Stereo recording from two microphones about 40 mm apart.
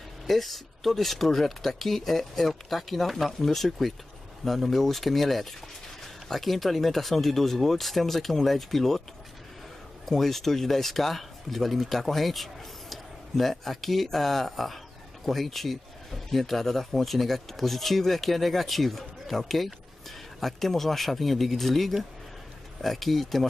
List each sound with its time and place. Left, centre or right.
0.3 s speech: centre
10.0 s speech: centre